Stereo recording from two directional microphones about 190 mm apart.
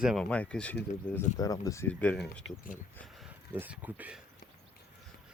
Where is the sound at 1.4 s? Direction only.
20° left (ahead or behind); by 2.6 s centre (ahead or behind).